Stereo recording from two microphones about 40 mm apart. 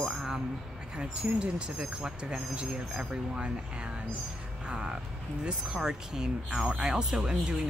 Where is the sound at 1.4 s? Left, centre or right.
Right.